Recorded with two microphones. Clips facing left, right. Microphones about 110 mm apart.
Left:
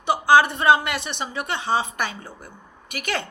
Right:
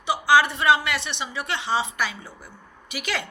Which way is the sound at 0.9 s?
45° left (ahead or behind).